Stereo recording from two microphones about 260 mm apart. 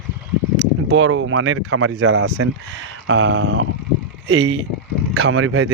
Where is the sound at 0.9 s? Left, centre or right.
Right.